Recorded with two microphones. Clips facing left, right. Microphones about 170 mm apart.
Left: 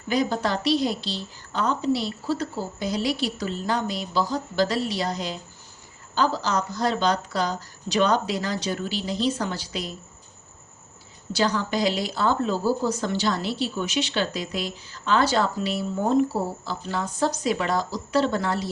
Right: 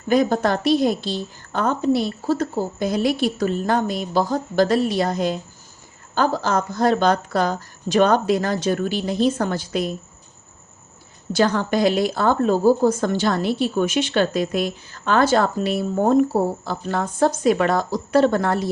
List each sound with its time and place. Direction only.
0.1 s a woman's voice: 50° right (ahead or behind)
11.3 s a woman's voice: 50° right (ahead or behind)